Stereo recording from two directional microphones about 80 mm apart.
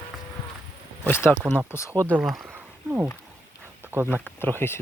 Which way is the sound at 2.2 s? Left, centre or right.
Centre.